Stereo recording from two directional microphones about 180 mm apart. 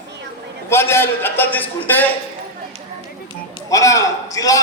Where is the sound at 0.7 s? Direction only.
15° left (ahead or behind).